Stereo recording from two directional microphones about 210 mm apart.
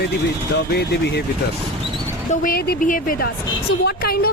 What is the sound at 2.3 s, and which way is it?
A woman's voice, 45° left (ahead or behind).